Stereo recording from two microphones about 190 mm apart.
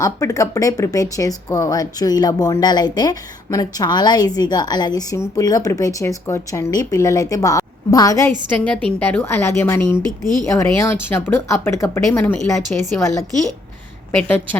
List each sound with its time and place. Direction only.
0.0 s speech: 15° left (ahead or behind)
8.5 s a woman's voice: 5° left (ahead or behind)
14.1 s a woman's voice: 10° left (ahead or behind)